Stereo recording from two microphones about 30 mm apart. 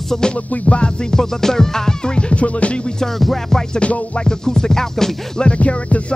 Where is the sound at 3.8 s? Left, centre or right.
Left.